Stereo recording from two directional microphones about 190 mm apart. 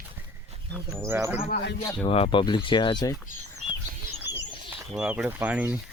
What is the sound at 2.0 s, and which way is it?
Speech, 30° left (ahead or behind).